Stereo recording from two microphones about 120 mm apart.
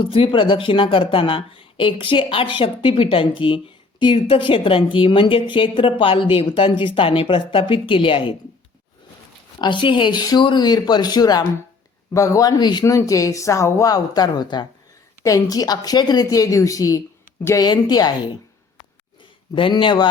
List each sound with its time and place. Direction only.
0.0 s a woman's voice: 45° left (ahead or behind)
9.6 s speech: 40° left (ahead or behind)
19.5 s speech: 45° left (ahead or behind)